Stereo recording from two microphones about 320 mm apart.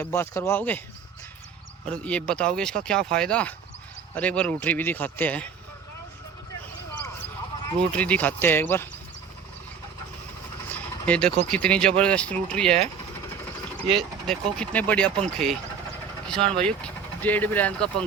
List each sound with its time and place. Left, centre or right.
0.0 s speech: centre
1.9 s speech: centre
7.9 s speech: centre
10.7 s speech: centre